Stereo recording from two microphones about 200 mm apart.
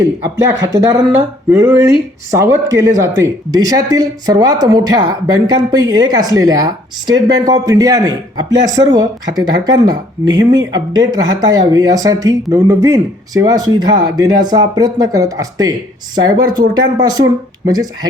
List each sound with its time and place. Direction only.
0.0 s a man's voice: 15° right (ahead or behind)